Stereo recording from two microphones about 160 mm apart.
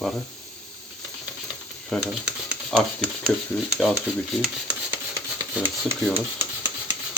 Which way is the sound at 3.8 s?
Centre (ahead or behind).